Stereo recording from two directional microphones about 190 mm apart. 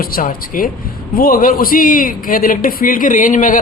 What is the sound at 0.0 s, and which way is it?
Speech, 50° left (ahead or behind).